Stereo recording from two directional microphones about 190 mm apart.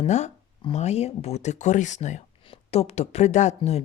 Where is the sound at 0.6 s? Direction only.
35° left (ahead or behind).